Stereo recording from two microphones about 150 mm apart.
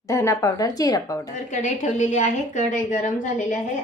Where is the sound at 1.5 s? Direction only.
55° left (ahead or behind).